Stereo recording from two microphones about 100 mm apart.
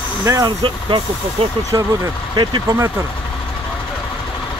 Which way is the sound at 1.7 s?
35° right (ahead or behind).